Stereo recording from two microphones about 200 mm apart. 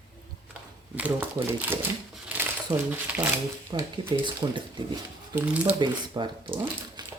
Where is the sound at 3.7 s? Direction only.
25° right (ahead or behind).